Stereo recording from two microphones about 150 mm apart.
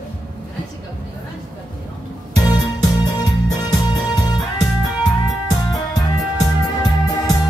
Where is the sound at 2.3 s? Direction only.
25° left (ahead or behind).